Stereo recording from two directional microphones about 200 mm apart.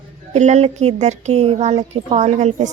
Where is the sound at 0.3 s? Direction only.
35° right (ahead or behind).